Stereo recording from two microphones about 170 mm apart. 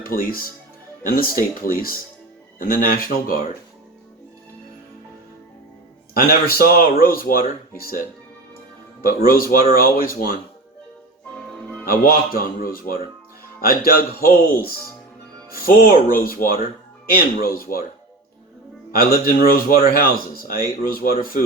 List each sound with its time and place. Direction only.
0.0 s speech: 60° left (ahead or behind)
6.1 s speech: 60° left (ahead or behind)
11.5 s music: 5° left (ahead or behind)
11.9 s speech: 60° left (ahead or behind)
15.5 s speech: 60° left (ahead or behind)
18.9 s speech: 60° left (ahead or behind)